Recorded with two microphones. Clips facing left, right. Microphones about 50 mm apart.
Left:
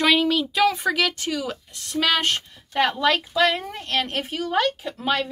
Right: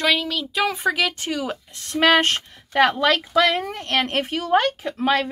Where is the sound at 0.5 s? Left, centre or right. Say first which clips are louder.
Right 2 dB; centre.